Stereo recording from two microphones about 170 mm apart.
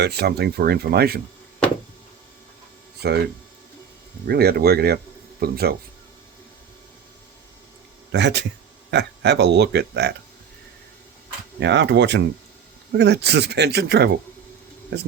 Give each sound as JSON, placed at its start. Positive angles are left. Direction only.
{"t": 0.0, "sound": "speech", "side_deg": -70}
{"t": 3.0, "sound": "speech", "side_deg": -75}
{"t": 4.3, "sound": "speech", "side_deg": -65}
{"t": 8.1, "sound": "speech", "side_deg": -90}
{"t": 11.6, "sound": "speech", "side_deg": -90}
{"t": 13.0, "sound": "speech", "side_deg": -80}